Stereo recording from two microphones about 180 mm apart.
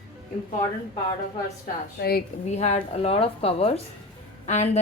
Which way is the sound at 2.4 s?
40° left (ahead or behind).